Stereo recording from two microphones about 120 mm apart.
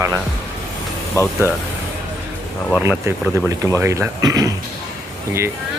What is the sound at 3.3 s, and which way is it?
A man's voice, 25° right (ahead or behind).